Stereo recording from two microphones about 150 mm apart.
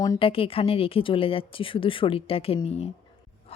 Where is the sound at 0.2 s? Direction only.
40° left (ahead or behind).